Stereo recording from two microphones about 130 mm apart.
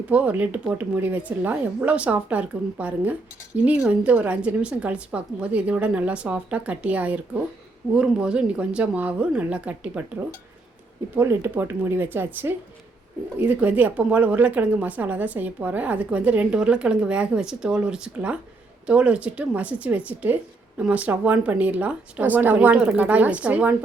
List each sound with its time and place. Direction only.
0.1 s a woman's voice: 10° right (ahead or behind)
11.1 s a woman's voice: 15° right (ahead or behind)